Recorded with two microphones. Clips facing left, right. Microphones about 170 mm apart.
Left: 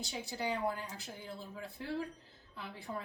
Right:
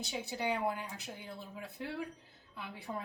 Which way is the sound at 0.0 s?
20° right (ahead or behind).